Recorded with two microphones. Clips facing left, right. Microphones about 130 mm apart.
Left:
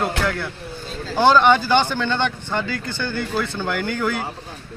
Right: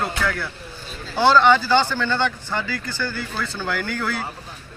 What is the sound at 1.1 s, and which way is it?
Speech, 15° left (ahead or behind).